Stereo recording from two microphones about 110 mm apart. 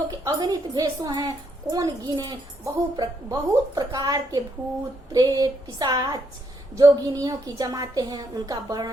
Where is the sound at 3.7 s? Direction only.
35° right (ahead or behind).